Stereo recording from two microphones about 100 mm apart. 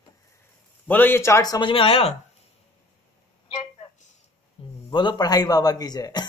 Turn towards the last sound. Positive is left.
turn(degrees=45)  # may be behind; listen again after turning